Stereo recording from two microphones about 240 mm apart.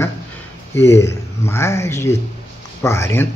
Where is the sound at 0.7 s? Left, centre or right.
Centre.